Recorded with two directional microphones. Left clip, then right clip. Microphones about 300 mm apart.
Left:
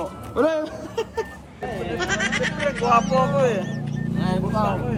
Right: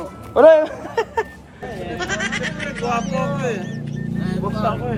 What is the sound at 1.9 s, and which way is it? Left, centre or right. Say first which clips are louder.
Speech: even; centre.